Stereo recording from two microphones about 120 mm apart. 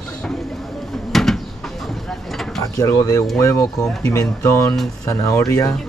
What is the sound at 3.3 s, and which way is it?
Speech, 25° left (ahead or behind).